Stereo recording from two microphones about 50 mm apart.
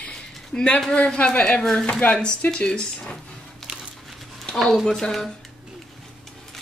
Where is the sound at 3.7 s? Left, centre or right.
Right.